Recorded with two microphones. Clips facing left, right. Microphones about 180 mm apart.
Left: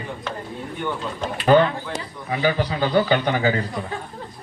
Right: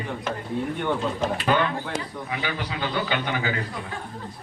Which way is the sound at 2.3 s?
35° left (ahead or behind).